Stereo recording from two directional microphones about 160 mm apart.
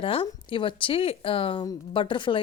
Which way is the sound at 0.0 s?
35° left (ahead or behind).